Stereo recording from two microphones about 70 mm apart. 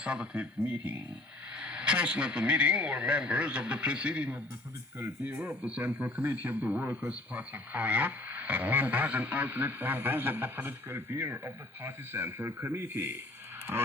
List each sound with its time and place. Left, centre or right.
0.0 s speech: centre; by 13.8 s right